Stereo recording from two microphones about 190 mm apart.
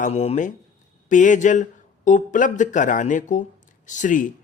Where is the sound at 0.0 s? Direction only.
30° left (ahead or behind).